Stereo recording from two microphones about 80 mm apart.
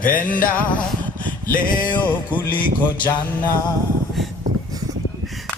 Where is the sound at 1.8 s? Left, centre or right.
Left.